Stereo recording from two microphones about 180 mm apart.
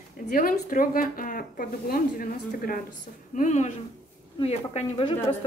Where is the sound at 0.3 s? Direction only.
50° left (ahead or behind).